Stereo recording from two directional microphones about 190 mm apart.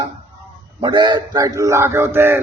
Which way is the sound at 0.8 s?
25° right (ahead or behind).